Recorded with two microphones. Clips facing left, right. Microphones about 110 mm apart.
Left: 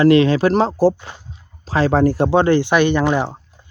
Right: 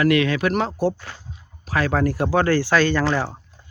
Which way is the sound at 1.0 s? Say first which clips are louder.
Left 2 dB; 20° left (ahead or behind).